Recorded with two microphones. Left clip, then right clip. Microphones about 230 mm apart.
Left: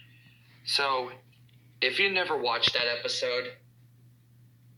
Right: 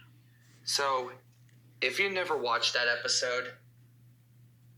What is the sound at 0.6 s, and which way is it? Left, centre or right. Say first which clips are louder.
Speech: left 2 dB; centre.